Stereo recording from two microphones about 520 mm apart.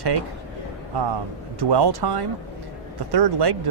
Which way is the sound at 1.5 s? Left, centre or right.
Right.